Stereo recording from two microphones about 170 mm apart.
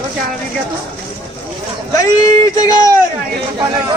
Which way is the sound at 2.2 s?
20° left (ahead or behind).